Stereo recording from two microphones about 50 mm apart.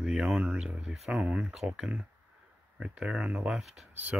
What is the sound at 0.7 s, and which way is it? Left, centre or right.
Speech, right.